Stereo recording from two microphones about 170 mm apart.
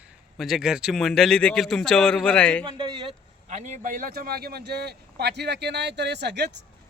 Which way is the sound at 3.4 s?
45° right (ahead or behind).